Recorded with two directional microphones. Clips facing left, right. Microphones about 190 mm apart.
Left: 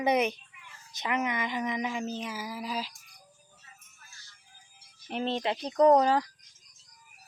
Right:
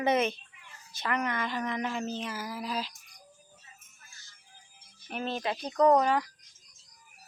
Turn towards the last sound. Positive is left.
turn(degrees=30)  # may be behind; listen again after turning